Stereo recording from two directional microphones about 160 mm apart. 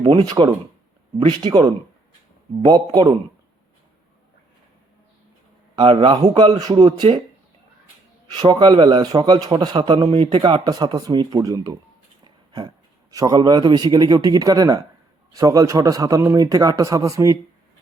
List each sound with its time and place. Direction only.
0.0 s a man's voice: 35° right (ahead or behind)
5.7 s a man's voice: 30° right (ahead or behind)
8.3 s a man's voice: 25° right (ahead or behind)